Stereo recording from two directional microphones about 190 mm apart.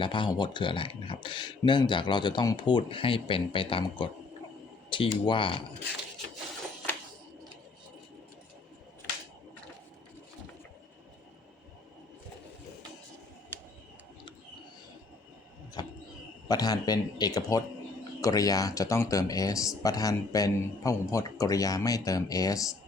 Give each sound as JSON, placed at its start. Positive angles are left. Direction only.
{"t": 0.0, "sound": "speech", "side_deg": 25}
{"t": 16.5, "sound": "speech", "side_deg": 20}